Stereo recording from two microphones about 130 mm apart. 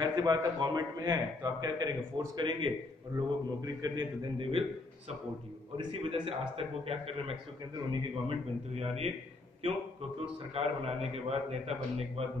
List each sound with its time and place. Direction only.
0.0 s a man's voice: 35° right (ahead or behind)
4.4 s a man's voice: 45° right (ahead or behind)
5.8 s a man's voice: 40° right (ahead or behind)